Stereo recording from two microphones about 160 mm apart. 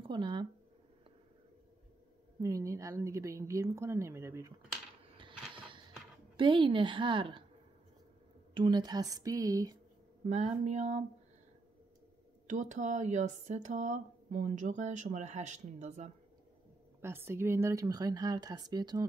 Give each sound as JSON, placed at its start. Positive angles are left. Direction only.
{"t": 0.0, "sound": "speech", "side_deg": -30}
{"t": 2.4, "sound": "speech", "side_deg": -20}
{"t": 5.0, "sound": "a sound", "side_deg": -30}
{"t": 6.3, "sound": "a woman's voice", "side_deg": -30}
{"t": 8.5, "sound": "speech", "side_deg": -25}
{"t": 10.2, "sound": "speech", "side_deg": -45}
{"t": 12.4, "sound": "speech", "side_deg": -50}
{"t": 17.0, "sound": "speech", "side_deg": -15}